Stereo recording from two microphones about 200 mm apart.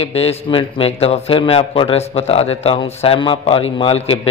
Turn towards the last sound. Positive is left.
turn(degrees=30)  # may be behind; listen again after turning